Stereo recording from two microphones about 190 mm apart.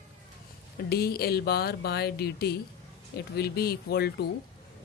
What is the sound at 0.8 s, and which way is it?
Speech, 55° left (ahead or behind).